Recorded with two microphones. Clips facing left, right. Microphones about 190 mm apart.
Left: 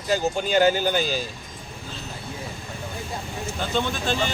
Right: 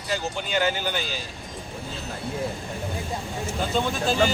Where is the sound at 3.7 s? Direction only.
Centre (ahead or behind).